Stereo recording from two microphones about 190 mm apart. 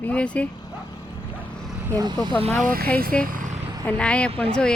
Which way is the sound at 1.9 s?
20° right (ahead or behind).